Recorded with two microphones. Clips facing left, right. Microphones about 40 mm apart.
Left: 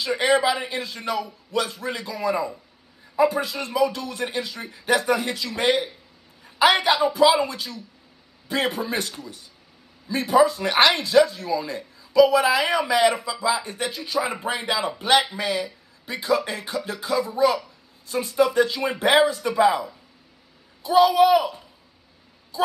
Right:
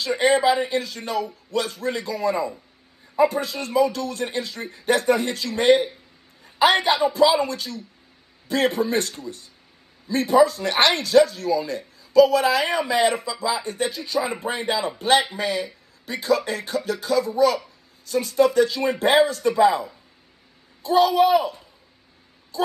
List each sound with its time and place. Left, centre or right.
0.0 s speech: left
20.8 s speech: left
21.1 s speech: left